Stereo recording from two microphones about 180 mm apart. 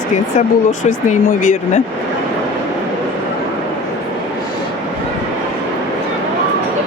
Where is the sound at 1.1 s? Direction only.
50° left (ahead or behind).